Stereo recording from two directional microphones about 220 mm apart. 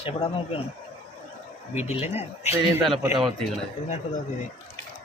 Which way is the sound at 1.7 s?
25° left (ahead or behind).